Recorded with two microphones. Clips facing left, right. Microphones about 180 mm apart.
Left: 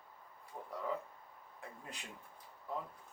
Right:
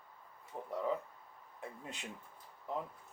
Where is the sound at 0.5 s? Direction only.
25° right (ahead or behind).